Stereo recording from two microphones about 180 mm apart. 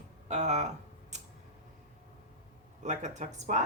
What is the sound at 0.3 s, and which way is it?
Speech, 40° right (ahead or behind).